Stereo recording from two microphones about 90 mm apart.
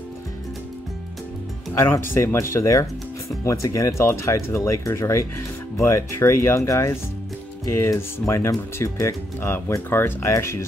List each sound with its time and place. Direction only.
1.7 s speech: 25° left (ahead or behind)